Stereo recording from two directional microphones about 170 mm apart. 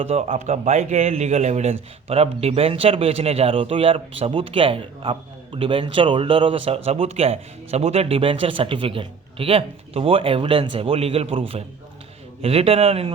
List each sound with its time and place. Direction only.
0.1 s a man's voice: 40° right (ahead or behind)